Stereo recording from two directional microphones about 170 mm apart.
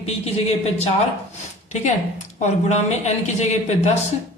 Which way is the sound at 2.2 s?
40° left (ahead or behind).